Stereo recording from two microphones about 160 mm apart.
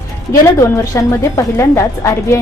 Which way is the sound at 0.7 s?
20° left (ahead or behind).